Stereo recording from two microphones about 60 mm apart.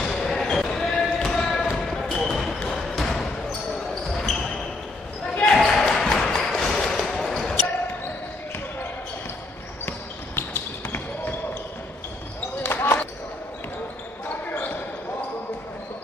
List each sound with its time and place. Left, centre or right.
0.0 s basketball bounce: centre
9.8 s basketball bounce: left
12.6 s basketball bounce: left
14.5 s basketball bounce: left